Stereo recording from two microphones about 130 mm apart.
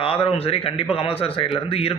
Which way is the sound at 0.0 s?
45° left (ahead or behind).